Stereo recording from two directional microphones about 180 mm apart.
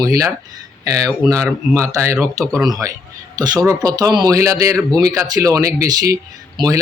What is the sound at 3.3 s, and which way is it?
Speech, 20° right (ahead or behind).